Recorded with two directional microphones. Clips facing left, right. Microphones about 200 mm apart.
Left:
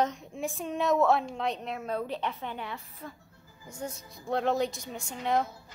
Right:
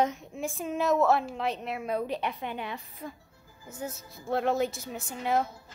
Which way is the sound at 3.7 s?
5° right (ahead or behind).